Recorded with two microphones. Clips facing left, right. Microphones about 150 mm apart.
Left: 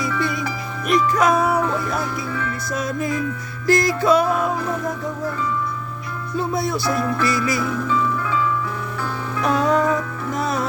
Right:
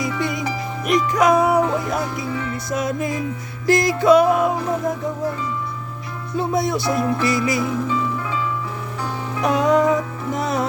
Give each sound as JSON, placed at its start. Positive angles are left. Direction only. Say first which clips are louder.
{"t": 0.0, "sound": "music", "louder": "even", "side_deg": -20}
{"t": 6.3, "sound": "music", "louder": "right 2 dB", "side_deg": -20}